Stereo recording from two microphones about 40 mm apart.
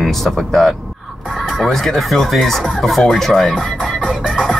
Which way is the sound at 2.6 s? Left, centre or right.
Centre.